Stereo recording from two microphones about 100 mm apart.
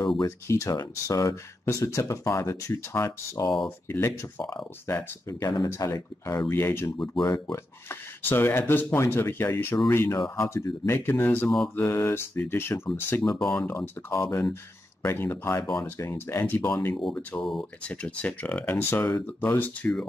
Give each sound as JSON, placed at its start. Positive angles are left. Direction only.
{"t": 0.0, "sound": "speech", "side_deg": 45}
{"t": 0.5, "sound": "speech", "side_deg": 30}
{"t": 3.4, "sound": "speech", "side_deg": 5}
{"t": 3.9, "sound": "speech", "side_deg": 25}
{"t": 5.6, "sound": "speech", "side_deg": 35}
{"t": 17.4, "sound": "speech", "side_deg": 0}
{"t": 17.8, "sound": "speech", "side_deg": 15}